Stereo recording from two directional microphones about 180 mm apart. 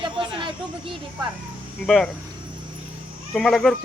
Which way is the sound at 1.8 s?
Centre (ahead or behind).